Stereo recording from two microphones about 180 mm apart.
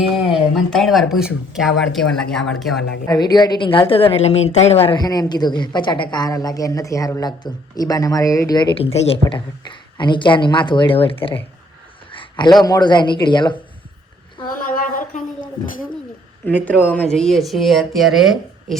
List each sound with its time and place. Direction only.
0.1 s speech: centre (ahead or behind)
3.1 s speech: 25° left (ahead or behind)
12.1 s a sound: 25° left (ahead or behind)
12.6 s speech: 20° left (ahead or behind)
14.5 s a sound: 50° left (ahead or behind)
16.6 s speech: 10° left (ahead or behind)